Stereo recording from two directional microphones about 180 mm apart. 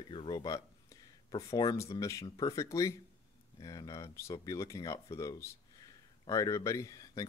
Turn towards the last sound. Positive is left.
turn(degrees=20)  # may be behind; listen again after turning